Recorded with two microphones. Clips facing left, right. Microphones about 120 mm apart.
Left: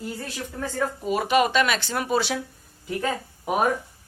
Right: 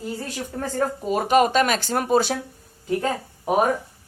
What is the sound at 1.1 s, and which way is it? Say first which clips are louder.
Speech: right 3 dB; 40° right (ahead or behind).